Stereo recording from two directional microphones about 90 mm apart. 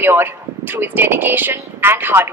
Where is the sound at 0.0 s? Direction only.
25° right (ahead or behind).